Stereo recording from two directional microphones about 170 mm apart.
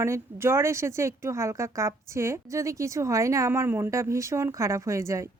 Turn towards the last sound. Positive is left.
turn(degrees=-15)  # may be behind; listen again after turning